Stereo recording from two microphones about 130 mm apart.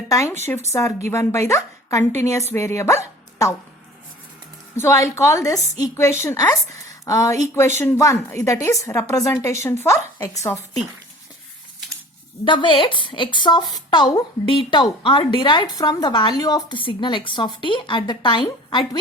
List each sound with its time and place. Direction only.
0.1 s a woman's voice: 20° left (ahead or behind)
4.8 s a woman's voice: 20° left (ahead or behind)
12.5 s a woman's voice: 40° left (ahead or behind)